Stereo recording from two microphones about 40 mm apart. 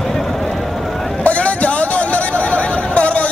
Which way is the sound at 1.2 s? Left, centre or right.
Left.